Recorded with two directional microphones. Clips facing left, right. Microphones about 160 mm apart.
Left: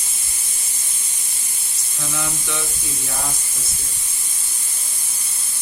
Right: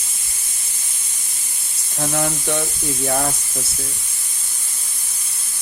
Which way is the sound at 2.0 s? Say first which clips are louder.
Right 7 dB; 55° right (ahead or behind).